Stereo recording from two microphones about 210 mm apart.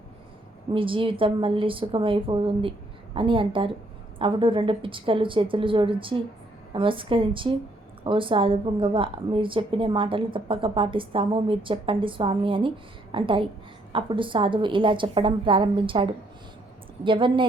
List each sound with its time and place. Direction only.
0.7 s a woman's voice: 25° right (ahead or behind)